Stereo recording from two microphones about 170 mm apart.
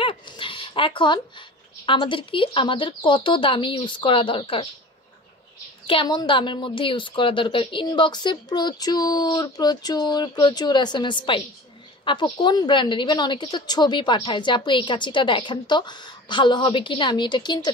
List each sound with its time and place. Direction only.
0.0 s a sound: 30° left (ahead or behind)
1.9 s a woman's voice: 30° left (ahead or behind)
5.9 s a woman's voice: 30° left (ahead or behind)